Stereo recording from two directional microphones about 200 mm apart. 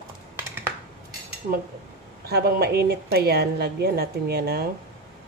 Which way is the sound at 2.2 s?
50° right (ahead or behind).